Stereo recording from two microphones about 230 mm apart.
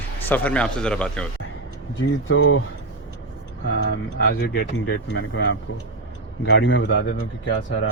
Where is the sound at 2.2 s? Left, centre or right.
Left.